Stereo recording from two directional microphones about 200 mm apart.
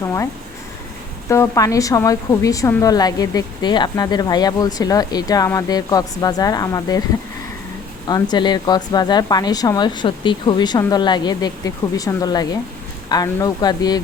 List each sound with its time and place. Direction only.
0.0 s a sound: 15° left (ahead or behind)
1.3 s a woman's voice: 15° left (ahead or behind)
8.0 s a woman's voice: 20° left (ahead or behind)